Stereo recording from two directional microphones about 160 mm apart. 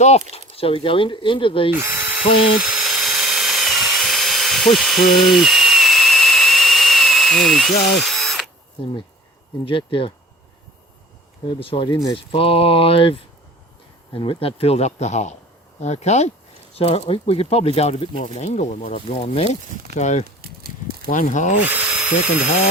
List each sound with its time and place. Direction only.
0.3 s speech: 35° left (ahead or behind)
1.7 s drill: 15° right (ahead or behind)
2.6 s tools: centre (ahead or behind)
7.9 s drill: centre (ahead or behind)
9.6 s speech: 35° left (ahead or behind)
11.4 s speech: 35° left (ahead or behind)
20.4 s a sound: 70° right (ahead or behind)
21.1 s speech: 55° left (ahead or behind)
21.6 s speech: 10° right (ahead or behind)